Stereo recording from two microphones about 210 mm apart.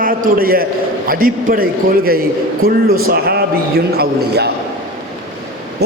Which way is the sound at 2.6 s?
45° right (ahead or behind).